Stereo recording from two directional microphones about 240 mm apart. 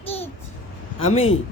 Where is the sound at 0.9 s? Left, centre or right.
Left.